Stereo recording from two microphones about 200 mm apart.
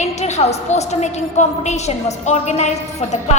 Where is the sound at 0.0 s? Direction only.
35° left (ahead or behind).